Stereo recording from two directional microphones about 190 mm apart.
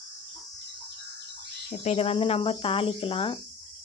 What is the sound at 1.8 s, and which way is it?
Speech, 35° left (ahead or behind).